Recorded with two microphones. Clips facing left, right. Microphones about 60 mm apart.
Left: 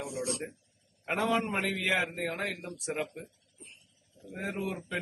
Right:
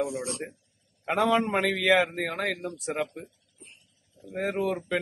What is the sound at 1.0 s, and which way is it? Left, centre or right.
Speech, right.